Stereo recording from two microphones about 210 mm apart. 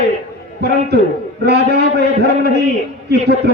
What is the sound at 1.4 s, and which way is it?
A man's voice, 50° right (ahead or behind).